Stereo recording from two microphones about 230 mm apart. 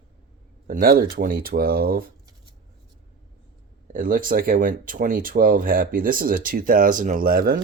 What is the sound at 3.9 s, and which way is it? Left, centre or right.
Speech, right.